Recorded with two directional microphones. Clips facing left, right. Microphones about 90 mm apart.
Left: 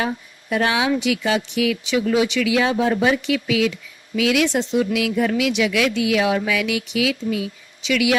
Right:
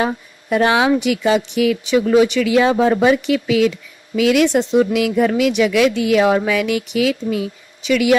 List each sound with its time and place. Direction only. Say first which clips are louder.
0.0 s speech: right 4 dB; 50° right (ahead or behind)
4.8 s speech: right 4 dB; 45° right (ahead or behind)